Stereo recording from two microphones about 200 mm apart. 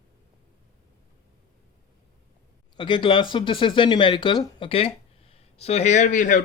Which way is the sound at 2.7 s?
25° left (ahead or behind).